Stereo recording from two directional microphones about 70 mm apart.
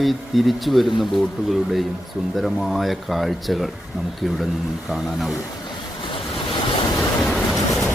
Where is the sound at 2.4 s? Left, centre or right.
Centre.